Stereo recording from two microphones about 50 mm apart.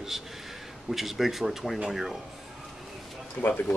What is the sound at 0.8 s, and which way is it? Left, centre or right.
Speech, centre.